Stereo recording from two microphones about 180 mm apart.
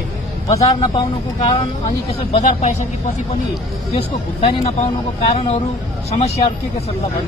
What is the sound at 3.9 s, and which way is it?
Speech, 35° left (ahead or behind).